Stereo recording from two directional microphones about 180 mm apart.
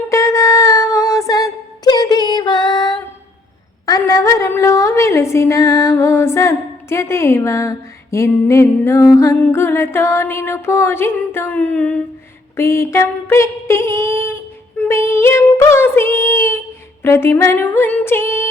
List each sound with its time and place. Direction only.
0.1 s female singing: 15° left (ahead or behind)
3.8 s a woman's voice: 20° left (ahead or behind)
12.5 s a sound: 15° left (ahead or behind)
14.8 s child singing: 15° left (ahead or behind)
17.0 s music: 15° left (ahead or behind)